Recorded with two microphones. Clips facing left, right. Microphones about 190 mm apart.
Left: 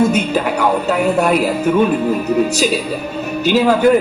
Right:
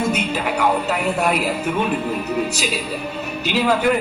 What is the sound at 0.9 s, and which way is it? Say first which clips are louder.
Speech: left 6 dB; 45° left (ahead or behind).